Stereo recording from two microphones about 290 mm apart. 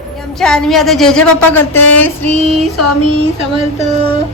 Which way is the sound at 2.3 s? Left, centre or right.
Right.